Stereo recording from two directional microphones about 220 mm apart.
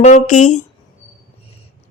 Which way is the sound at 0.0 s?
35° left (ahead or behind).